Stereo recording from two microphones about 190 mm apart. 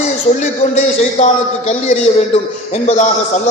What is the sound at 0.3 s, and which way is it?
A man's voice, 40° left (ahead or behind).